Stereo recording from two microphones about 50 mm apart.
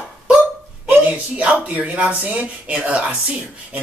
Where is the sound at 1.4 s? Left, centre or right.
Right.